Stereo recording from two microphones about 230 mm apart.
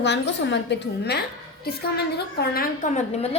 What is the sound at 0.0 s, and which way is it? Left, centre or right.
A woman's voice, left.